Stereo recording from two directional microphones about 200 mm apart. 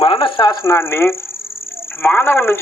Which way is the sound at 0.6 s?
15° left (ahead or behind).